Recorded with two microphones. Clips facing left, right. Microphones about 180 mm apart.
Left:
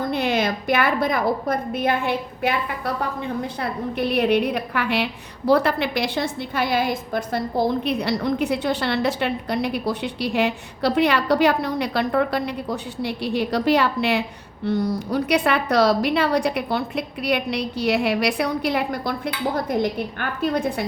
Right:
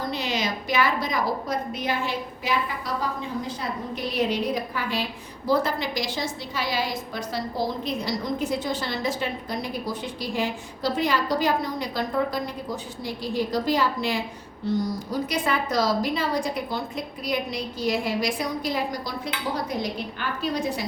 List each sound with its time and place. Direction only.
0.0 s a woman's voice: 55° left (ahead or behind)